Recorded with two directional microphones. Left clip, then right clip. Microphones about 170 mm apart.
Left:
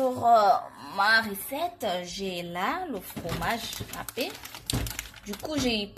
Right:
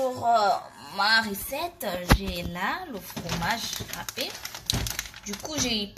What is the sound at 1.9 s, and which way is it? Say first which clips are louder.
A woman's voice: right 6 dB; 25° left (ahead or behind).